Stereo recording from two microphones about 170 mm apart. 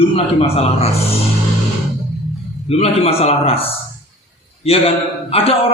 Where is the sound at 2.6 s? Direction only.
35° left (ahead or behind).